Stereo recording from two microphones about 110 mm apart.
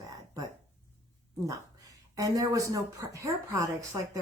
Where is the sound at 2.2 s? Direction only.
30° right (ahead or behind).